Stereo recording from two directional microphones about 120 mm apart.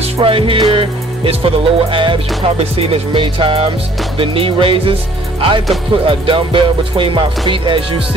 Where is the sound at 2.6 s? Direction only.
55° right (ahead or behind).